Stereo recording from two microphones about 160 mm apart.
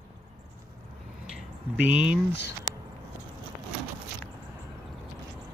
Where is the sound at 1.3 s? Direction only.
10° right (ahead or behind).